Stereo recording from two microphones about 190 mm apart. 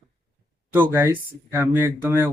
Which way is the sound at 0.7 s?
15° right (ahead or behind).